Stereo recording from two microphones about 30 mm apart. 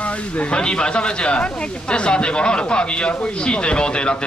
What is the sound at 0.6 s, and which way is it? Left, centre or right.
Speech, left.